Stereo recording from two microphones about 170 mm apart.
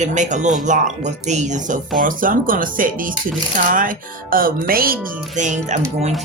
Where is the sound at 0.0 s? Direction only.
45° right (ahead or behind).